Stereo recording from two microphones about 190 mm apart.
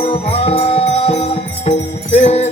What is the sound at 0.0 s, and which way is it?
Music, 30° left (ahead or behind).